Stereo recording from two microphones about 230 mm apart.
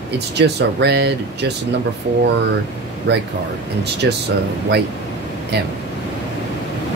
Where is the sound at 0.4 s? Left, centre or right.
Right.